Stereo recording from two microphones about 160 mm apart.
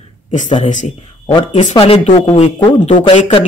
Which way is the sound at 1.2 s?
35° left (ahead or behind).